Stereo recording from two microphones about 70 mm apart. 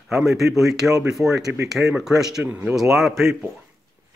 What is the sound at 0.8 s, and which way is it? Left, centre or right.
Speech, right.